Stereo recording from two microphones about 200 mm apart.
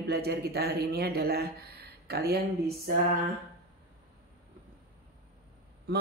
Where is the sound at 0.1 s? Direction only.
55° right (ahead or behind).